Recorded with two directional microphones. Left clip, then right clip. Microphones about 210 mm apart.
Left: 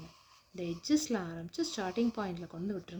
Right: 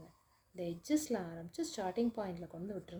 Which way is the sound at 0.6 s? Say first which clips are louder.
Left 4 dB; 45° left (ahead or behind).